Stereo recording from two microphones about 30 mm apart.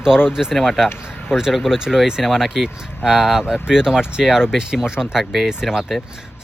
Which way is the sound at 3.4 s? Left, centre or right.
Right.